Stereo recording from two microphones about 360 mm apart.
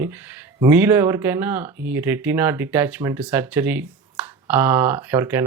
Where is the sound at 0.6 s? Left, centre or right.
Centre.